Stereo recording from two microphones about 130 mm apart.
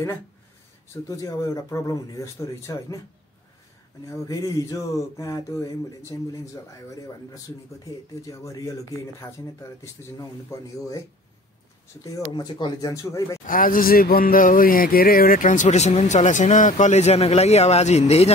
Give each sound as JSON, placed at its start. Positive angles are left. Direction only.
{"t": 1.0, "sound": "speech", "side_deg": 25}
{"t": 4.0, "sound": "speech", "side_deg": 25}
{"t": 8.3, "sound": "speech", "side_deg": 25}
{"t": 10.5, "sound": "speech", "side_deg": 20}
{"t": 12.0, "sound": "speech", "side_deg": 30}
{"t": 12.9, "sound": "speech", "side_deg": 25}
{"t": 13.5, "sound": "speech", "side_deg": 90}